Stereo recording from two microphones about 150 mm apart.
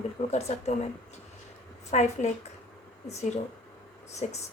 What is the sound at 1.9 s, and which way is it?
Speech, 50° left (ahead or behind).